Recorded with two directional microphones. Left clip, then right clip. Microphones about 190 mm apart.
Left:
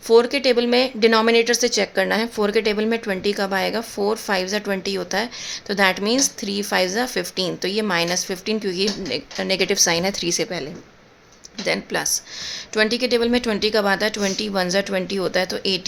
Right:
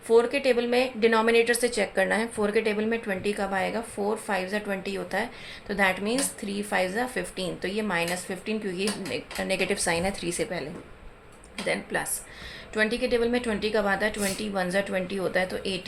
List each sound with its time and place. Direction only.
0.1 s a woman's voice: 40° left (ahead or behind)